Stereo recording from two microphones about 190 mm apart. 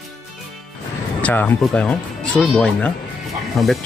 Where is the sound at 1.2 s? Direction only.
10° left (ahead or behind).